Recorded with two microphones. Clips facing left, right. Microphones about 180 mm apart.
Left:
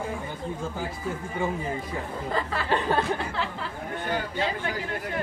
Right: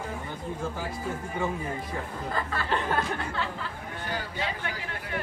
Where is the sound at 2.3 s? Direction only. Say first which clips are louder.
Left 3 dB; 25° left (ahead or behind).